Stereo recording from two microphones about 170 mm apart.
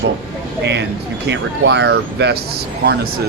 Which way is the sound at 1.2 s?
80° right.